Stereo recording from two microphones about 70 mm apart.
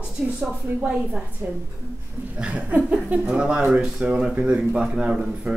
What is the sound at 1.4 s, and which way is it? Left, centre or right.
Speech, right.